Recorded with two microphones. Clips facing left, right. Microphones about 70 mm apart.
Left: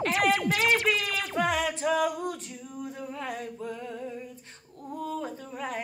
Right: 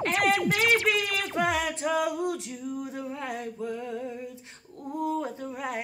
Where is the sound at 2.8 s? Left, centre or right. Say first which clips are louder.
Right 1 dB; centre.